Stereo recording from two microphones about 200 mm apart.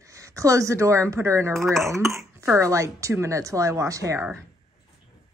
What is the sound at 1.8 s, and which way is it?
A woman's voice, 15° right (ahead or behind).